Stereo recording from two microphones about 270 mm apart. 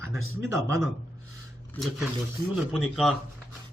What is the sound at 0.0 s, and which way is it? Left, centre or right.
Speech, centre.